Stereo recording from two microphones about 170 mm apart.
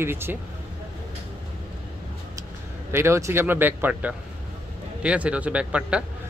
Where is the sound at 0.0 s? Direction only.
15° right (ahead or behind).